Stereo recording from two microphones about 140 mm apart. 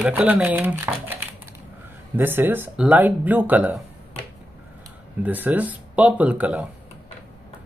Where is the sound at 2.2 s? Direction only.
15° right (ahead or behind).